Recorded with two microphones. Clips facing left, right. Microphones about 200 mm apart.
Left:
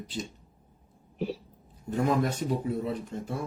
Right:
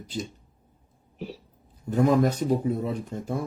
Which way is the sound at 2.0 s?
40° right (ahead or behind).